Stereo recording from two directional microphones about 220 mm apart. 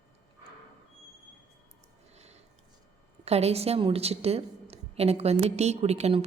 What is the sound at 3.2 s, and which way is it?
A woman's voice, 30° right (ahead or behind).